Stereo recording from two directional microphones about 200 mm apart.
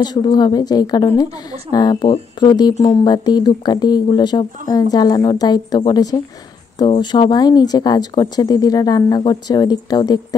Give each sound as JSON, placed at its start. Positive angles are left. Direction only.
{"t": 0.0, "sound": "speech", "side_deg": 20}